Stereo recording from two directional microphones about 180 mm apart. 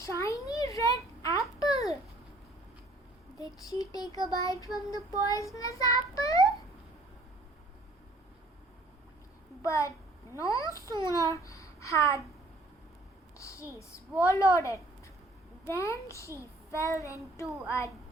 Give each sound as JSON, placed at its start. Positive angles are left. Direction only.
{"t": 0.0, "sound": "a sound", "side_deg": 15}
{"t": 0.4, "sound": "babbling", "side_deg": 20}
{"t": 3.3, "sound": "child singing", "side_deg": 20}
{"t": 9.6, "sound": "a child's voice", "side_deg": 15}
{"t": 13.4, "sound": "a child's voice", "side_deg": 15}